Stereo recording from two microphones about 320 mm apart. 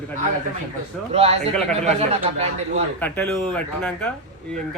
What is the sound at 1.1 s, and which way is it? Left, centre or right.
Speech, centre.